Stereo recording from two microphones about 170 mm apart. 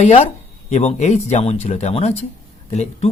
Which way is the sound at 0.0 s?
40° left (ahead or behind).